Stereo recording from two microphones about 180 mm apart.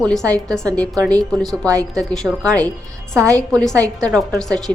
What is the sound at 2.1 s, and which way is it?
Speech, 5° left (ahead or behind).